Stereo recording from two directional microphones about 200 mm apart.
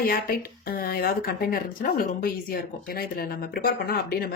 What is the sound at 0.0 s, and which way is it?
Speech, 45° left (ahead or behind).